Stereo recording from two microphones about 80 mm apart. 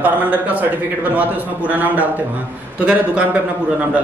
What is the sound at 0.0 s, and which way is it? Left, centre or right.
A man's voice, centre.